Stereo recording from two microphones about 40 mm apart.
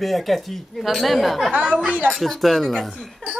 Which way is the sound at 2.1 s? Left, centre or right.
Centre.